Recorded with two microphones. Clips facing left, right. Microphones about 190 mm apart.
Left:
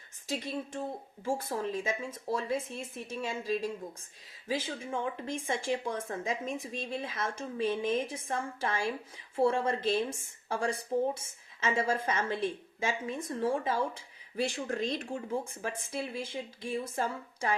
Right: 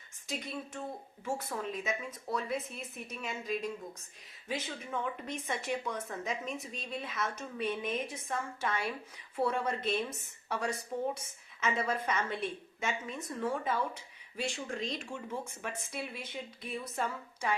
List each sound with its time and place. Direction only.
0.3 s a woman's voice: 30° left (ahead or behind)